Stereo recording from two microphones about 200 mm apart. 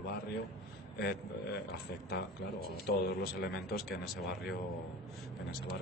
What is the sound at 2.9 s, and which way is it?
Speech, 50° left (ahead or behind).